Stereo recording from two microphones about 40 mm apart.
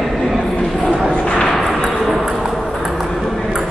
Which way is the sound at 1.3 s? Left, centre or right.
Left.